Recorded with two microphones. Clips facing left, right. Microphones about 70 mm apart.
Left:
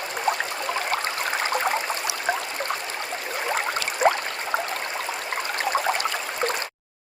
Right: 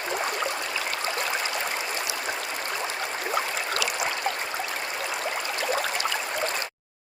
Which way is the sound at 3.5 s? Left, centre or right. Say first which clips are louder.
Left 2 dB; left.